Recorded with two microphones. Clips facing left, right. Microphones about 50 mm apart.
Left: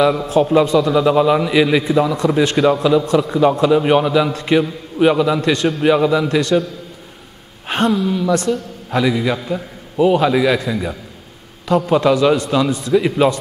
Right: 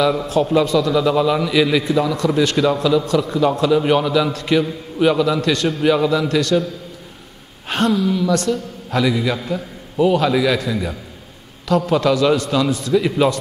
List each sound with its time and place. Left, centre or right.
0.0 s a man's voice: centre
7.6 s a man's voice: centre